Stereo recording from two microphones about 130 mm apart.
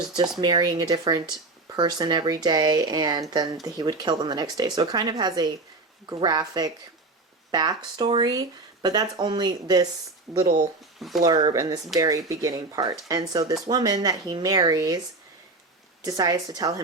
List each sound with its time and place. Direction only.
0.2 s speech: 35° right (ahead or behind)
10.3 s speech: centre (ahead or behind)
11.5 s speech: 30° right (ahead or behind)
16.0 s speech: 30° right (ahead or behind)